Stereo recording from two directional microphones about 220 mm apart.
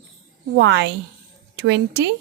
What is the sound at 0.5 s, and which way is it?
Speech, 55° right (ahead or behind).